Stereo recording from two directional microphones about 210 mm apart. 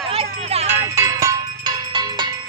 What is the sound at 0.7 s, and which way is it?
Cowbell, 15° right (ahead or behind).